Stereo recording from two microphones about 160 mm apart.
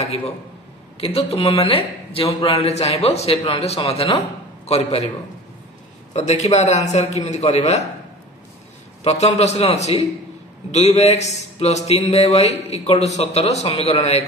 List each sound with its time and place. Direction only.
0.9 s a man's voice: 40° left (ahead or behind)
6.1 s a man's voice: 40° left (ahead or behind)
9.0 s a man's voice: 45° left (ahead or behind)